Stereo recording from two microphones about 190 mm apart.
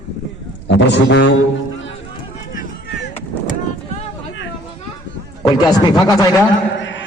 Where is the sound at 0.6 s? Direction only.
65° left (ahead or behind).